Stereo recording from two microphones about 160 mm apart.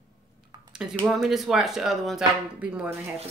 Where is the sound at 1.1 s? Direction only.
Centre (ahead or behind).